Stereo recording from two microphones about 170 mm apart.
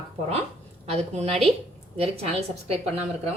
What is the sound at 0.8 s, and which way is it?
A woman's voice, 35° right (ahead or behind).